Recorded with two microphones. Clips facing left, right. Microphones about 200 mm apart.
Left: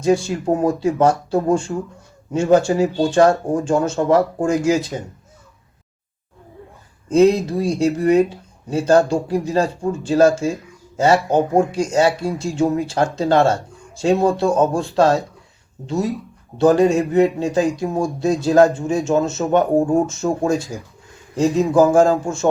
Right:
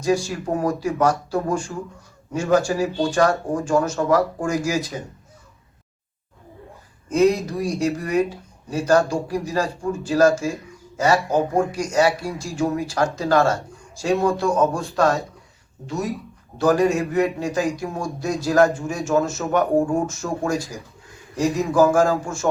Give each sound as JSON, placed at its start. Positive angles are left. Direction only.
{"t": 0.0, "sound": "speech", "side_deg": 25}
{"t": 7.1, "sound": "speech", "side_deg": 25}
{"t": 15.9, "sound": "speech", "side_deg": 25}